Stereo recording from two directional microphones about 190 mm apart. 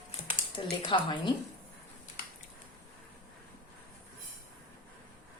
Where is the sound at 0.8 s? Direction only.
25° left (ahead or behind).